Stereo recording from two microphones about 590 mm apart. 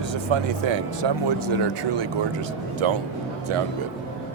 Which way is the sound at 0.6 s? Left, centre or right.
Right.